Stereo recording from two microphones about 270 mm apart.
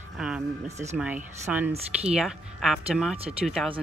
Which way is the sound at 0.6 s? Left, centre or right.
Right.